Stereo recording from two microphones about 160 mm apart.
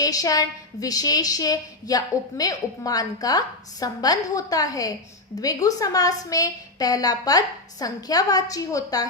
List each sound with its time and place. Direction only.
0.0 s a woman's voice: 20° left (ahead or behind)